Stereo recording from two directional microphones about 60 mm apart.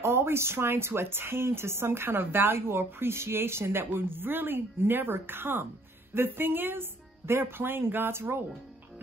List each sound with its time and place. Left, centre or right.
0.0 s speech: right